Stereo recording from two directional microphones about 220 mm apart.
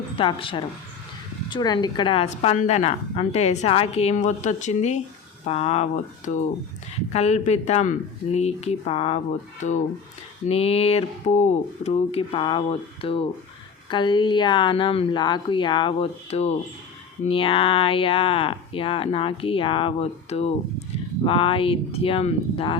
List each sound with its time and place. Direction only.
0.2 s speech: 25° left (ahead or behind)